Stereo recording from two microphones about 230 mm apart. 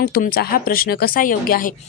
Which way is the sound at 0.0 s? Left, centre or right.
Left.